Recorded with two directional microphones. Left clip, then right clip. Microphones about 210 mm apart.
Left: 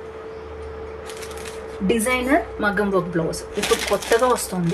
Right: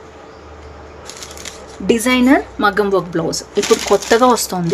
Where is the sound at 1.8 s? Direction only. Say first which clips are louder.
Right 7 dB; 55° right (ahead or behind).